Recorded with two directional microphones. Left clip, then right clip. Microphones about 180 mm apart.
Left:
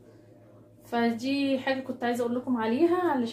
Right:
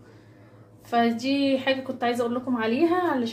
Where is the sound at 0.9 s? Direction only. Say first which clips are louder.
Right 5 dB; 5° right (ahead or behind).